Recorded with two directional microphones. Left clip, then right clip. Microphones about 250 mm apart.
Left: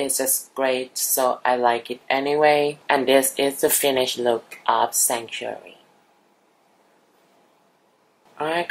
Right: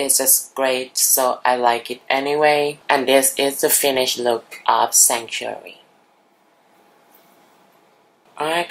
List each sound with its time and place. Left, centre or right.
0.0 s speech: centre
8.4 s speech: centre